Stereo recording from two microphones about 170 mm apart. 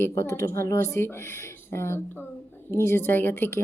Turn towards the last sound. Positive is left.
turn(degrees=15)  # may be behind; listen again after turning